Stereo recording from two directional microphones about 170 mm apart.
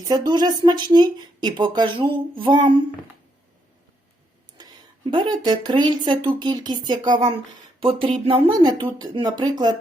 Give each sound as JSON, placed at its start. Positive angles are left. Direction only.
{"t": 0.1, "sound": "speech", "side_deg": -25}
{"t": 5.1, "sound": "speech", "side_deg": -25}